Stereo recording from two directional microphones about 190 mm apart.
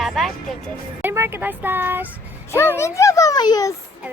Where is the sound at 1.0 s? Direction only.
10° right (ahead or behind).